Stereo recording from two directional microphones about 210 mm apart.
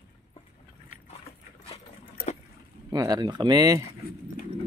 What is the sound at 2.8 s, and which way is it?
Speech, 20° right (ahead or behind).